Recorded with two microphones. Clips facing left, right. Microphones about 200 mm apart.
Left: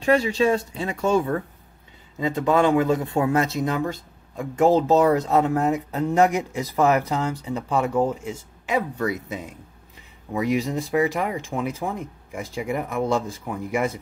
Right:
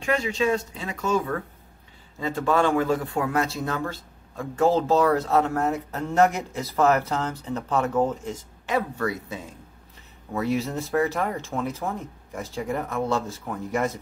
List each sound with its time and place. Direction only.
0.0 s speech: 35° left (ahead or behind)
2.1 s speech: 20° left (ahead or behind)